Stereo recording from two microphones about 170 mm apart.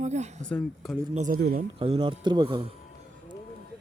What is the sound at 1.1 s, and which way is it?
Speech, 45° right (ahead or behind).